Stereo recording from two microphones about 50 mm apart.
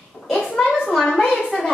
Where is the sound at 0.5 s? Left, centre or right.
Centre.